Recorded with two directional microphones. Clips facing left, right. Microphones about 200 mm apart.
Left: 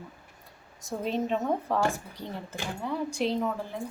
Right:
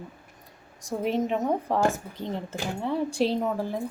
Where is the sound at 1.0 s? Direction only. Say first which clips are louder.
Right 3 dB; 15° right (ahead or behind).